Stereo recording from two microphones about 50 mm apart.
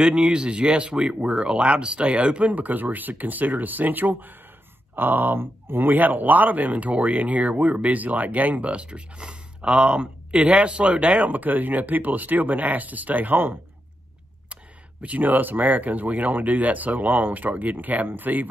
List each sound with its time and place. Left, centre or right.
0.0 s speech: centre; by 18.5 s right